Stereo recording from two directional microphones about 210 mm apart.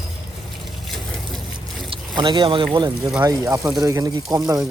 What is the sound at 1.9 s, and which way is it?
Boat, 20° right (ahead or behind).